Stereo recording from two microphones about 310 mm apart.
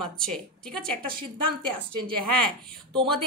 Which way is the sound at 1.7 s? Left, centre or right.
Right.